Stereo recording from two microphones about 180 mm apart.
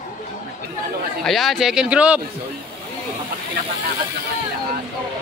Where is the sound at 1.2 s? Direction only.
Centre (ahead or behind).